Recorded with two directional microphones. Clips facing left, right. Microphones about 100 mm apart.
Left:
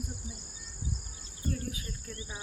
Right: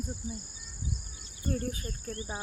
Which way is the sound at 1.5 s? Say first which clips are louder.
Right 6 dB; 40° right (ahead or behind).